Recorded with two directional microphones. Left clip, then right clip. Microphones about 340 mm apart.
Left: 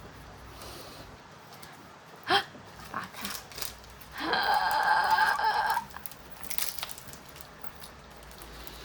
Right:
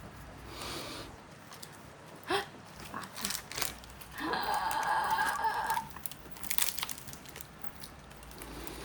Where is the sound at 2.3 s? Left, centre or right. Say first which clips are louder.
Left 7 dB; left.